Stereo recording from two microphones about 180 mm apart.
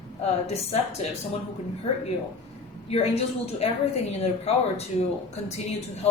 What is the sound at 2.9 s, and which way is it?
Speech, 35° left (ahead or behind).